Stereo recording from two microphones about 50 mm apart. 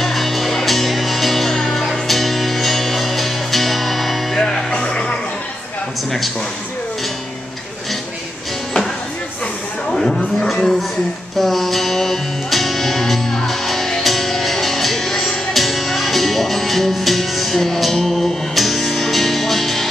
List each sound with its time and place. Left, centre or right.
0.0 s music: centre
4.4 s music: centre
9.8 s a sound: centre
11.3 s music: centre